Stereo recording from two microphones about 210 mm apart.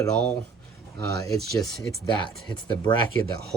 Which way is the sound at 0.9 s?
15° left (ahead or behind).